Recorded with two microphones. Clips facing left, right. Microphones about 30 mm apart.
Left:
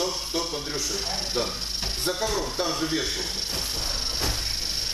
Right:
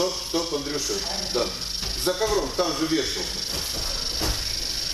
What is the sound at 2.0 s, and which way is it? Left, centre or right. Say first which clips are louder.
Music: right 4 dB; centre.